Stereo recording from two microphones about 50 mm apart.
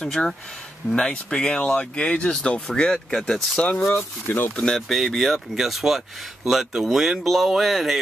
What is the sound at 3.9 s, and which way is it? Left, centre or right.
Speech, left.